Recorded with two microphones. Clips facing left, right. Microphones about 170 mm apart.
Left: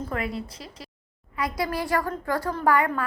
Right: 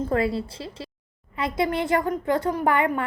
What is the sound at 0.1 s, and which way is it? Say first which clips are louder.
A woman's voice: right 7 dB; 30° right (ahead or behind).